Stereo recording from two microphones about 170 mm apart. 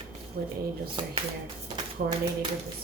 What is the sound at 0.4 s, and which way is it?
Speech, 65° right (ahead or behind).